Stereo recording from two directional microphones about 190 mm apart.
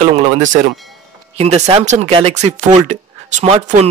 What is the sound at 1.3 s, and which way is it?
Speech, 35° right (ahead or behind).